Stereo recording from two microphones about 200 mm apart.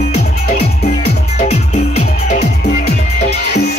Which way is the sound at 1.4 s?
35° left (ahead or behind).